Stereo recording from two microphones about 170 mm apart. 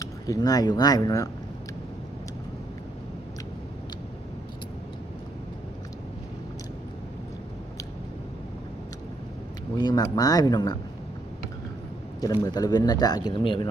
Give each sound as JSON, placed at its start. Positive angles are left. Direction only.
{"t": 0.0, "sound": "speech", "side_deg": 20}
{"t": 9.7, "sound": "speech", "side_deg": 25}
{"t": 12.2, "sound": "speech", "side_deg": 20}